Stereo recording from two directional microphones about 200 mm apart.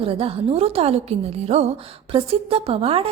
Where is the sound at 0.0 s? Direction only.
30° right (ahead or behind).